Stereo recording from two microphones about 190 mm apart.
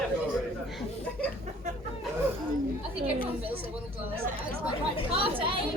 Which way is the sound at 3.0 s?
30° right (ahead or behind).